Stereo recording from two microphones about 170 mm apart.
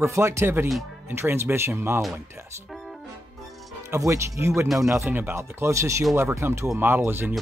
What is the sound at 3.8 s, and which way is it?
Speech, 15° right (ahead or behind).